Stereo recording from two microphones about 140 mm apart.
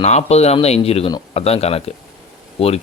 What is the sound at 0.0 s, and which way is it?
A man's voice, 50° left (ahead or behind).